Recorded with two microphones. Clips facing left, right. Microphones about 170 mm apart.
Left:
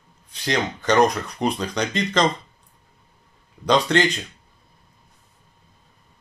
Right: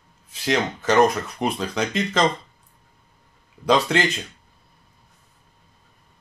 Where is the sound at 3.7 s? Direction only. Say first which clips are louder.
Left 1 dB; 5° right (ahead or behind).